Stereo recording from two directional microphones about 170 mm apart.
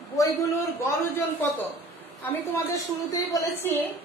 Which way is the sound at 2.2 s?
15° left (ahead or behind).